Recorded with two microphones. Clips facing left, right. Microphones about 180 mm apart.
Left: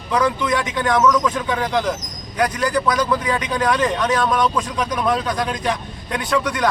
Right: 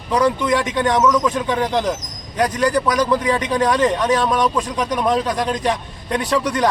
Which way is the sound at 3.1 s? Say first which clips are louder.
Right 3 dB; 35° right (ahead or behind).